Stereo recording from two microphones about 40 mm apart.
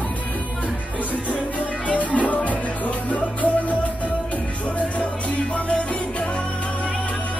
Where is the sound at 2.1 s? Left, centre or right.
Left.